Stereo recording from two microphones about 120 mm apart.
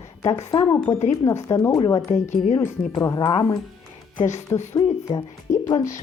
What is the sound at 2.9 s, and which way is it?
Speech, 35° left (ahead or behind).